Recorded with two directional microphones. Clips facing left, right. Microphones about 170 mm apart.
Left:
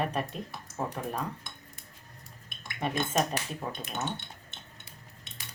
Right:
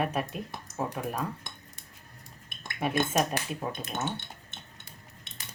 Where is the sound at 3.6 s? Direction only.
15° right (ahead or behind).